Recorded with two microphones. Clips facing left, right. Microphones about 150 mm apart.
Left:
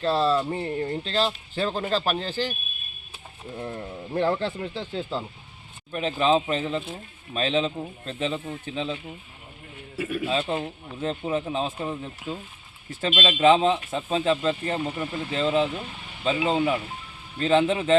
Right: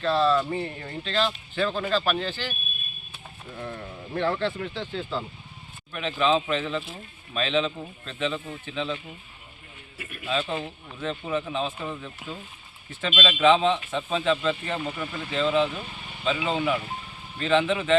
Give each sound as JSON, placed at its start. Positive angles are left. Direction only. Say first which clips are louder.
{"t": 0.0, "sound": "speech", "louder": "even", "side_deg": 35}
{"t": 3.6, "sound": "speech", "louder": "left 2 dB", "side_deg": 30}
{"t": 10.2, "sound": "speech", "louder": "right 1 dB", "side_deg": 35}
{"t": 14.8, "sound": "speech", "louder": "left 3 dB", "side_deg": 25}